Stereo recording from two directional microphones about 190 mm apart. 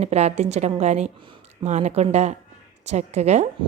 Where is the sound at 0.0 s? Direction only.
35° right (ahead or behind).